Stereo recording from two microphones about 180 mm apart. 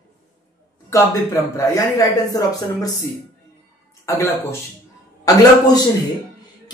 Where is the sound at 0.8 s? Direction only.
15° left (ahead or behind).